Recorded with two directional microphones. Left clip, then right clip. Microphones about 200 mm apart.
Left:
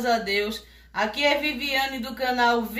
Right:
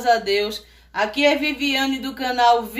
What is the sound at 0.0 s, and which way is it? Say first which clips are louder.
Speech: right 5 dB; 50° right (ahead or behind).